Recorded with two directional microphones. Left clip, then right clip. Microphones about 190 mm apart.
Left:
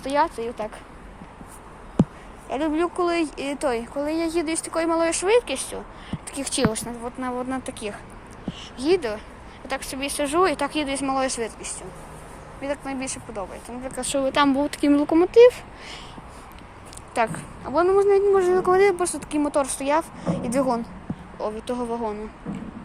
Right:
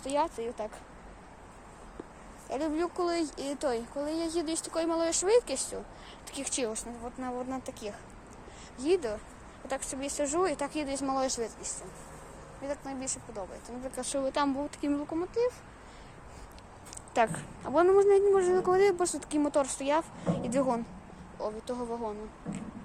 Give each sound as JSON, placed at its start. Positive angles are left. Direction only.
{"t": 0.0, "sound": "speech", "side_deg": -15}
{"t": 2.5, "sound": "speech", "side_deg": -10}
{"t": 6.4, "sound": "speech", "side_deg": -5}
{"t": 8.8, "sound": "a woman's voice", "side_deg": -20}
{"t": 15.0, "sound": "speech", "side_deg": 25}
{"t": 17.2, "sound": "a woman's voice", "side_deg": -30}
{"t": 21.3, "sound": "speech", "side_deg": -10}